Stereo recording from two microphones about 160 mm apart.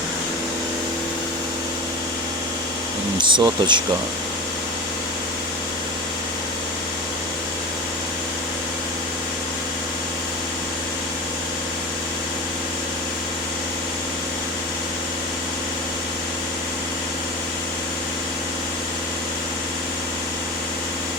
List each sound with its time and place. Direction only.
3.2 s speech: 30° right (ahead or behind)